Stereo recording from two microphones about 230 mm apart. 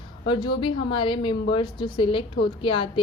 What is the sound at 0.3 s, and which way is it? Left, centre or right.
Speech, centre.